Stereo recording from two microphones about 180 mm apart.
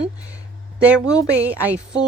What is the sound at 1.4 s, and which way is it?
Speech, 10° right (ahead or behind).